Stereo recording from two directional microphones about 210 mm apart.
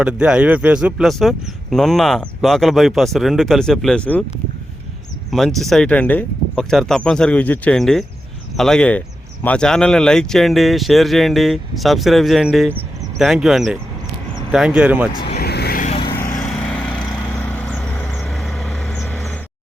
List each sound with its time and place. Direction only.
0.0 s speech: 5° right (ahead or behind)
5.3 s speech: centre (ahead or behind)
15.4 s vehicle: 50° left (ahead or behind)
15.9 s vehicle: 25° left (ahead or behind)
16.5 s vehicle: 5° left (ahead or behind)